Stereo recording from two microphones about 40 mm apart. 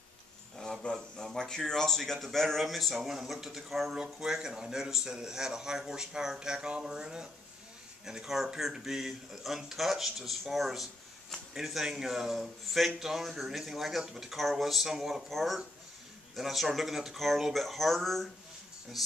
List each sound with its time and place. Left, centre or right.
0.9 s a sound: centre
1.6 s speech: centre
3.0 s a man's voice: centre
3.9 s a man's voice: centre
11.5 s a man's voice: centre